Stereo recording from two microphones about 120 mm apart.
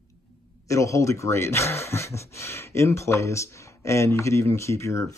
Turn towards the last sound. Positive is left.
turn(degrees=25)  # may be behind; listen again after turning